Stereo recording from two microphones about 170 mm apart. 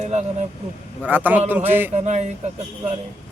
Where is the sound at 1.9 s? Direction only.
40° right (ahead or behind).